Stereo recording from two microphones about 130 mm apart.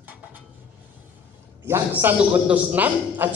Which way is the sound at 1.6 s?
20° right (ahead or behind).